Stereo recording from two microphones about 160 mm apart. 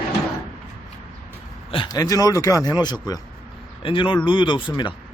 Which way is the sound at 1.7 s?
25° left (ahead or behind).